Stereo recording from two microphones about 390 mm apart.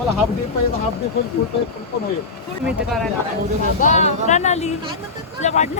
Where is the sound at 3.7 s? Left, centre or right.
Centre.